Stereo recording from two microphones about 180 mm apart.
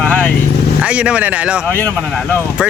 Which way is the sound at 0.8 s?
5° right (ahead or behind).